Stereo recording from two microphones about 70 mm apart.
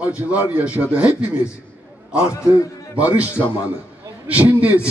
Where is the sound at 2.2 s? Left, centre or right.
Left.